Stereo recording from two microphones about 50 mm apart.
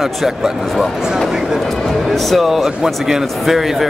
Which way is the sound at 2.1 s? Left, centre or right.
Centre.